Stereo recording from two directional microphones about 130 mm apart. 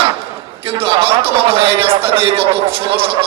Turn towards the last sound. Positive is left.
turn(degrees=-45)  # may be behind; listen again after turning